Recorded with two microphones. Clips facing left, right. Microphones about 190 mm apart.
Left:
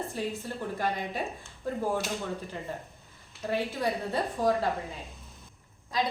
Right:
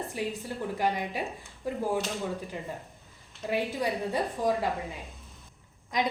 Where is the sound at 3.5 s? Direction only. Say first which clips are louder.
Even; 15° right (ahead or behind).